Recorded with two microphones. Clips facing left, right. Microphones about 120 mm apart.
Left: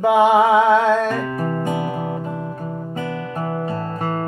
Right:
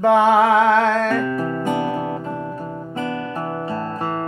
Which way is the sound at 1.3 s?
30° left (ahead or behind).